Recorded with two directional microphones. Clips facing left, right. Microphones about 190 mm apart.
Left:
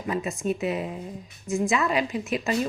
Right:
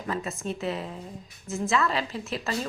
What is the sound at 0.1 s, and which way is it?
Speech, 15° left (ahead or behind).